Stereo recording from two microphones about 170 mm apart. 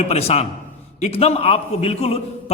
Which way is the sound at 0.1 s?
35° left (ahead or behind).